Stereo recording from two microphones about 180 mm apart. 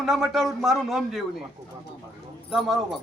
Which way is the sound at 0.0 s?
Centre (ahead or behind).